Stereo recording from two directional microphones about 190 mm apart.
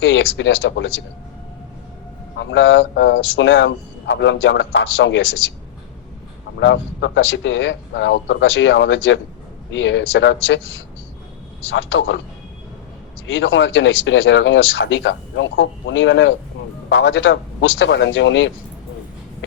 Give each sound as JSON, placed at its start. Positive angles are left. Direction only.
{"t": 0.0, "sound": "speech", "side_deg": 90}
{"t": 2.4, "sound": "speech", "side_deg": 80}
{"t": 6.6, "sound": "speech", "side_deg": 70}
{"t": 13.2, "sound": "speech", "side_deg": 90}